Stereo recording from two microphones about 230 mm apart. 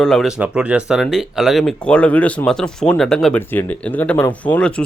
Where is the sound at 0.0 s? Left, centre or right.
Centre.